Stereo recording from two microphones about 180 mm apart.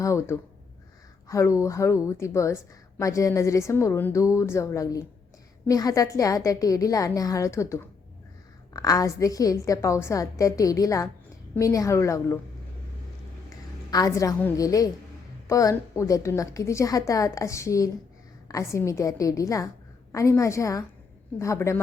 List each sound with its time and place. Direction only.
0.0 s a woman's voice: 15° left (ahead or behind)
13.9 s a woman's voice: 20° left (ahead or behind)